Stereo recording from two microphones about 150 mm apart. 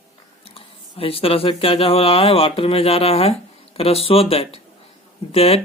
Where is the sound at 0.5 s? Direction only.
40° left (ahead or behind).